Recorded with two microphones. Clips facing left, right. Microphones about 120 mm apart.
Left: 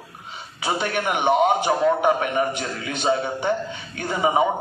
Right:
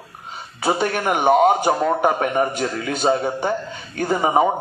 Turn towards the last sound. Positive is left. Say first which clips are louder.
# right 3 dB
turn(degrees=-40)  # may be behind; listen again after turning